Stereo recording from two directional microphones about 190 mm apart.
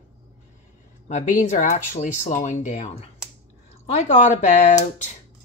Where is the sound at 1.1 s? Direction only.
40° left (ahead or behind).